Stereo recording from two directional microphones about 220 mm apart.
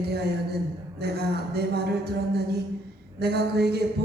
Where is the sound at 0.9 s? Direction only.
45° right (ahead or behind).